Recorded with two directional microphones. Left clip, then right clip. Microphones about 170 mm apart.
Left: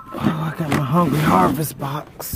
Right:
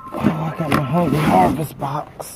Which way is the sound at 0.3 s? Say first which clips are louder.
Even; 20° left (ahead or behind).